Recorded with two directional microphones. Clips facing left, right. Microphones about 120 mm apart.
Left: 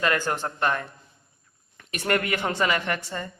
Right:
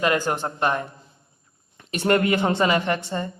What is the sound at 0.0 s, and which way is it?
A woman's voice, 20° right (ahead or behind).